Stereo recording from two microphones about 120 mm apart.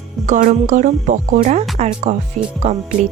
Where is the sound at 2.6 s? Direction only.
80° right.